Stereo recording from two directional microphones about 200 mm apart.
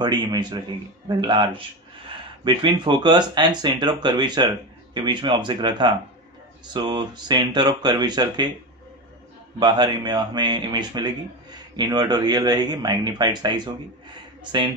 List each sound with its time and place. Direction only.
0.0 s speech: 20° right (ahead or behind)
9.6 s speech: 20° right (ahead or behind)